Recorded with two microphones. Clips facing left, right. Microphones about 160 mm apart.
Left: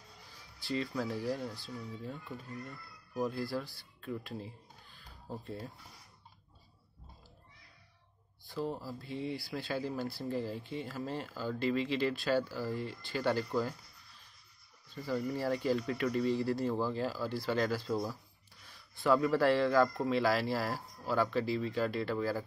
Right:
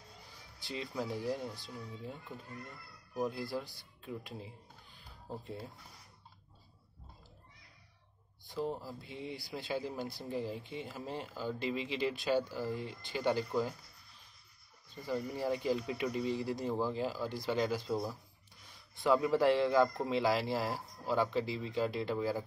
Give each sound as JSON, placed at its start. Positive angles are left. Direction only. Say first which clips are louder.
{"t": 0.6, "sound": "speech", "louder": "left 4 dB", "side_deg": -20}
{"t": 8.5, "sound": "speech", "louder": "even", "side_deg": -20}
{"t": 15.0, "sound": "speech", "louder": "left 1 dB", "side_deg": -20}